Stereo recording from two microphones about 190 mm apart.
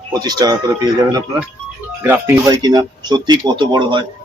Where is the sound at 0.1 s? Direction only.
20° right (ahead or behind).